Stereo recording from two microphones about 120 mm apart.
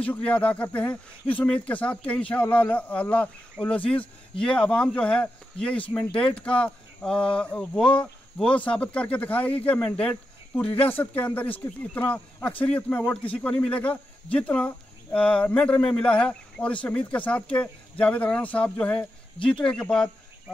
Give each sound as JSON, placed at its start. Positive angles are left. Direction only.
{"t": 0.0, "sound": "speech", "side_deg": 10}
{"t": 19.3, "sound": "speech", "side_deg": 45}
{"t": 19.6, "sound": "speech", "side_deg": 5}